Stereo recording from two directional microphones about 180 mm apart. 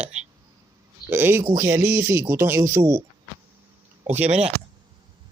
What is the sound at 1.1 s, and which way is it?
Speech, 15° right (ahead or behind).